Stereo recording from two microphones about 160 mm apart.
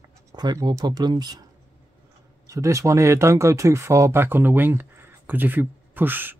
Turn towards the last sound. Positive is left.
turn(degrees=-10)  # may be behind; listen again after turning